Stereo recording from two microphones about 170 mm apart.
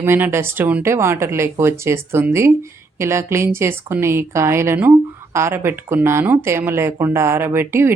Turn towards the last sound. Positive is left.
turn(degrees=-15)  # may be behind; listen again after turning